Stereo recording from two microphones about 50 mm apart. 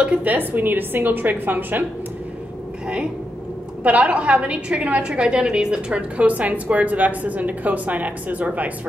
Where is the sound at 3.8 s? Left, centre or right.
Right.